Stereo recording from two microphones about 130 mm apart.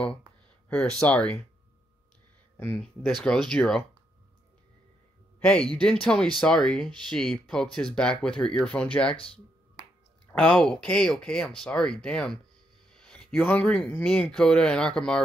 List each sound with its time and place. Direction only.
0.7 s speech: 10° left (ahead or behind)
2.5 s speech: 15° left (ahead or behind)
2.8 s speech: centre (ahead or behind)
5.4 s speech: 5° left (ahead or behind)
9.1 s speech: 45° left (ahead or behind)
10.3 s speech: 5° left (ahead or behind)